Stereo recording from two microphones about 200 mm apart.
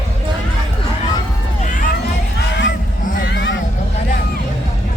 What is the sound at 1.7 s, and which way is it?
Run, 40° left (ahead or behind).